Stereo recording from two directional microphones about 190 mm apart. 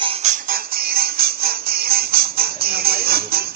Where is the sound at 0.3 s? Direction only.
50° right (ahead or behind).